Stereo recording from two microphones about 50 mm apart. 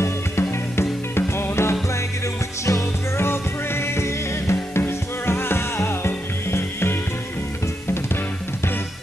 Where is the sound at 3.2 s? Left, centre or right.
Left.